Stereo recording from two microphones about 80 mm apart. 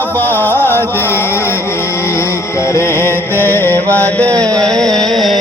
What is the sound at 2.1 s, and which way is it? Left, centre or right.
Music, left.